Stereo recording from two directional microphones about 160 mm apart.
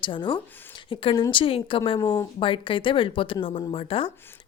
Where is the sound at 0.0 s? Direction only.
30° left (ahead or behind).